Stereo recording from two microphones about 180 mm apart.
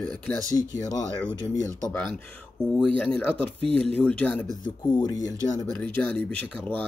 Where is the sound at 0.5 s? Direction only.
20° left (ahead or behind).